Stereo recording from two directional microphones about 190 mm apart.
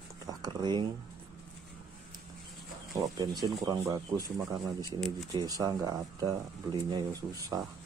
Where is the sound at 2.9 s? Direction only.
20° right (ahead or behind).